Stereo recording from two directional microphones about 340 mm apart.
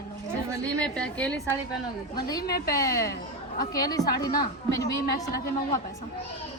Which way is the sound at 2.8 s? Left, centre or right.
Centre.